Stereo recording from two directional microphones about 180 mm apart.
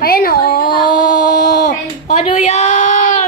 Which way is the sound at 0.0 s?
55° left (ahead or behind).